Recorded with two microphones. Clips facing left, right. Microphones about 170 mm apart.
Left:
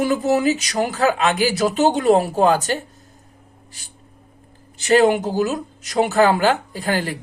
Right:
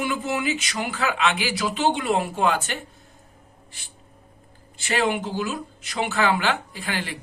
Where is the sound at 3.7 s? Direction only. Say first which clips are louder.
Left 2 dB; 40° left (ahead or behind).